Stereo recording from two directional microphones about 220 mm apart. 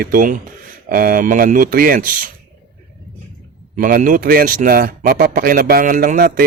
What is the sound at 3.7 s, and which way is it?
A man's voice, 35° right (ahead or behind).